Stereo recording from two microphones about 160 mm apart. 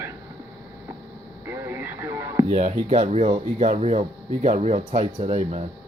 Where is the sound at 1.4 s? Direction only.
15° right (ahead or behind).